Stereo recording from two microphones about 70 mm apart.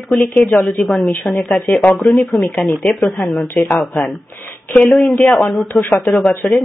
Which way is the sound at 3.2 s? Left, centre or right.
Centre.